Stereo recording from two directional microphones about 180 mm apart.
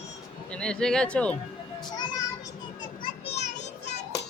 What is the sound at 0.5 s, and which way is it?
Speech, 5° left (ahead or behind).